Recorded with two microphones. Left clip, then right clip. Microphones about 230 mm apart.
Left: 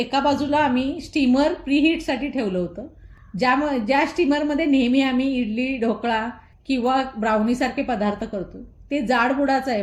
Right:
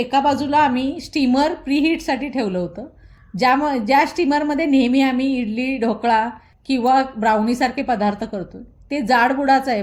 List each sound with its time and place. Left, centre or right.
0.0 s a woman's voice: right